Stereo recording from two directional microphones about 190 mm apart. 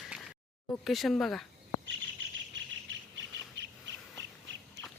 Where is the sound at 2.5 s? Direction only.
75° right (ahead or behind).